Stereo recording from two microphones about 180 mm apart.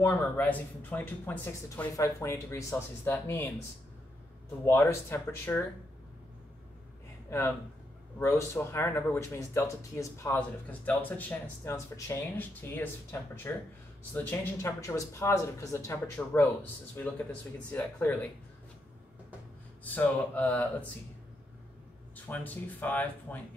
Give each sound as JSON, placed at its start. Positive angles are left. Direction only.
{"t": 0.0, "sound": "speech", "side_deg": 10}
{"t": 4.6, "sound": "speech", "side_deg": 15}
{"t": 7.2, "sound": "speech", "side_deg": 15}
{"t": 19.8, "sound": "speech", "side_deg": 10}
{"t": 22.1, "sound": "speech", "side_deg": 10}